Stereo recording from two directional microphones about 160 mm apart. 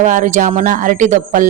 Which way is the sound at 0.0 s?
50° right (ahead or behind).